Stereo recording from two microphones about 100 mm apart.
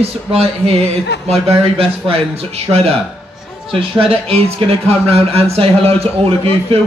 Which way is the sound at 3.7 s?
75° right (ahead or behind).